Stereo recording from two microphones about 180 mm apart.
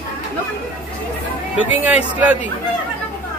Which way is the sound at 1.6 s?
10° right (ahead or behind).